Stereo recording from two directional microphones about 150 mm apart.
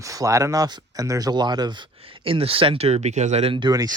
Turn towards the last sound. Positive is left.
turn(degrees=-25)  # may be behind; listen again after turning